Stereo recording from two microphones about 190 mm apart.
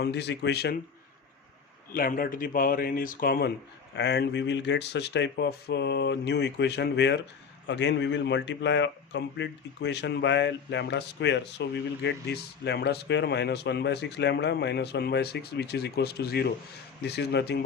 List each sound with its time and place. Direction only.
0.0 s speech: 65° left (ahead or behind)
1.9 s speech: 50° left (ahead or behind)
3.9 s speech: 65° left (ahead or behind)